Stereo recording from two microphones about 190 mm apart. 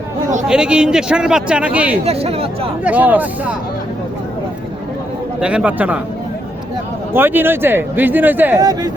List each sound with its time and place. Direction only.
0.4 s a man's voice: 5° right (ahead or behind)
2.0 s speech: 30° right (ahead or behind)
2.8 s speech: 10° right (ahead or behind)
5.4 s speech: 5° right (ahead or behind)
7.1 s speech: 10° right (ahead or behind)